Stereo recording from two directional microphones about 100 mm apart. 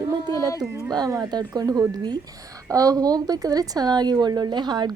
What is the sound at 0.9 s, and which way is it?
A woman's voice, 40° right (ahead or behind).